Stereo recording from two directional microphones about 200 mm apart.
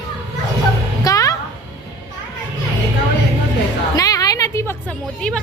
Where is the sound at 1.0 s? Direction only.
15° left (ahead or behind).